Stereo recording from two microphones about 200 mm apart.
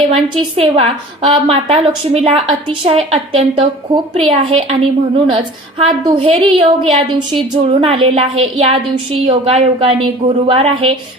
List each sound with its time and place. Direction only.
0.1 s a woman's voice: 30° right (ahead or behind)